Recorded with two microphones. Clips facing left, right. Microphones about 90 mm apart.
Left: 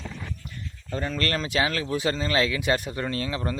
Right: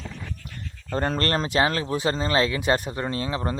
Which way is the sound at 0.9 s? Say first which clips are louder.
Right 5 dB; 55° right (ahead or behind).